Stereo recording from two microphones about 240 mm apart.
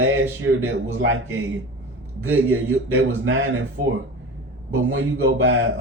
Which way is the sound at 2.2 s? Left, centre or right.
Right.